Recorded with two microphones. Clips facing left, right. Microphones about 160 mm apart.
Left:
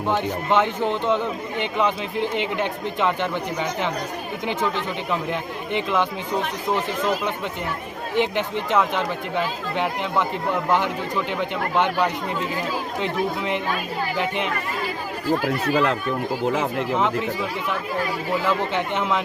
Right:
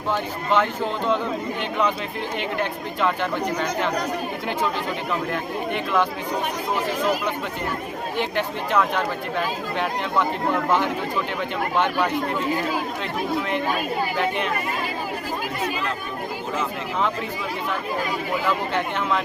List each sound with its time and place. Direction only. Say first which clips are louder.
0.1 s speech: left 1 dB; 20° left (ahead or behind)
5.3 s speech: even; 20° left (ahead or behind)
8.1 s speech: left 4 dB; 20° left (ahead or behind)
18.4 s speech: left 1 dB; 20° left (ahead or behind)